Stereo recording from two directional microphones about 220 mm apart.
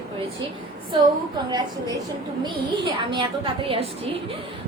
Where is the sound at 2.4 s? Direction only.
20° right (ahead or behind).